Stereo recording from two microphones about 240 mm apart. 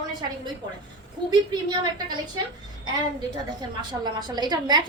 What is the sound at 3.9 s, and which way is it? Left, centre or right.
Speech, centre.